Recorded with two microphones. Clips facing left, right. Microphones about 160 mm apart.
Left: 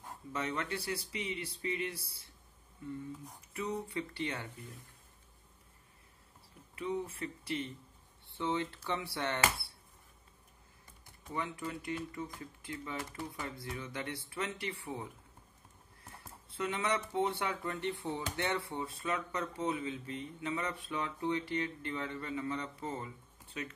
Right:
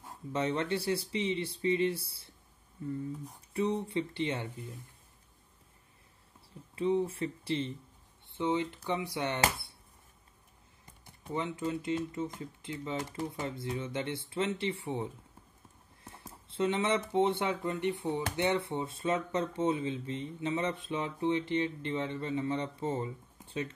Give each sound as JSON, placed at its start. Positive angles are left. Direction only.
{"t": 0.3, "sound": "speech", "side_deg": -30}
{"t": 6.7, "sound": "speech", "side_deg": -30}
{"t": 11.2, "sound": "speech", "side_deg": -25}
{"t": 16.0, "sound": "a sound", "side_deg": -25}
{"t": 16.4, "sound": "speech", "side_deg": -25}